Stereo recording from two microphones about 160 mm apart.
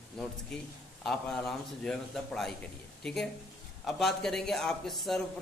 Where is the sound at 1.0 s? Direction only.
5° left (ahead or behind).